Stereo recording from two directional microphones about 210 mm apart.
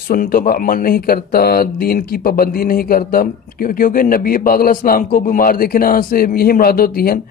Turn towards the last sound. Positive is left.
turn(degrees=45)  # may be behind; listen again after turning